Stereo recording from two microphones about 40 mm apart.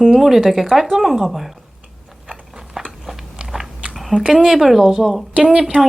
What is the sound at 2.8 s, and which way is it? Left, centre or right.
Biting, centre.